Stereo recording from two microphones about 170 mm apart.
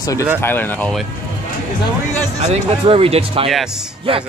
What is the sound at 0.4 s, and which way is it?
Speech, 15° left (ahead or behind).